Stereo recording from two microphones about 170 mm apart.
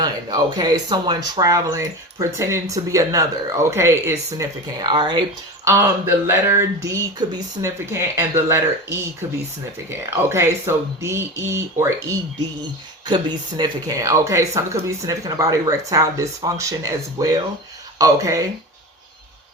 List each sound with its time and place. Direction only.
0.0 s speech: 25° right (ahead or behind)
5.6 s speech: 15° right (ahead or behind)